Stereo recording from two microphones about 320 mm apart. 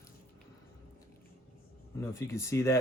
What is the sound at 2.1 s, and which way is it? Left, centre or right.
Speech, centre.